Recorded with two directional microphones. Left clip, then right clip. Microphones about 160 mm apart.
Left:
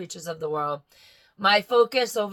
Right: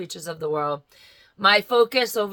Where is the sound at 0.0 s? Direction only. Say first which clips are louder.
Right 2 dB; 20° right (ahead or behind).